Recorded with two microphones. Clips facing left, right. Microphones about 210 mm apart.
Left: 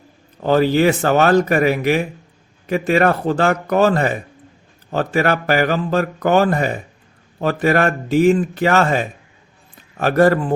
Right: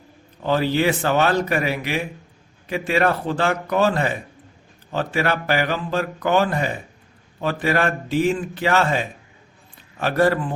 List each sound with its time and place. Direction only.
0.4 s speech: 45° left (ahead or behind)